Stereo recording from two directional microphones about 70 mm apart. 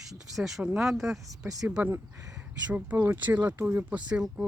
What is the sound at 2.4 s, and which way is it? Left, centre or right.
Speech, right.